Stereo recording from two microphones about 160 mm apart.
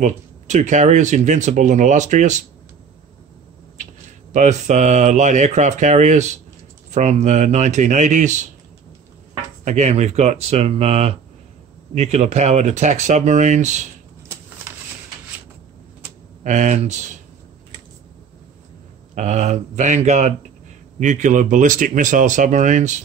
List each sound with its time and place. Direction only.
0.0 s speech: 50° right (ahead or behind)
4.3 s speech: 45° right (ahead or behind)
9.7 s speech: 45° right (ahead or behind)
16.4 s speech: 45° right (ahead or behind)
19.1 s speech: 45° right (ahead or behind)